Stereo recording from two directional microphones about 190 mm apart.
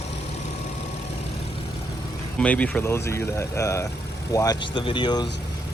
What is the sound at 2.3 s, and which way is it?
Speech, 5° left (ahead or behind).